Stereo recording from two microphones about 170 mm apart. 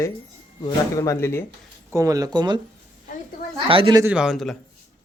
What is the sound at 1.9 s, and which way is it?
Speech, 20° right (ahead or behind).